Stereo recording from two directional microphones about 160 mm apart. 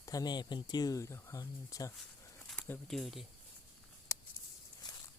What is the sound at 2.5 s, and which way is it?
Speech, 5° left (ahead or behind).